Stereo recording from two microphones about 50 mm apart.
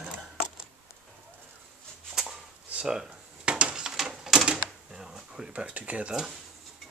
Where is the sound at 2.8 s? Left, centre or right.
Centre.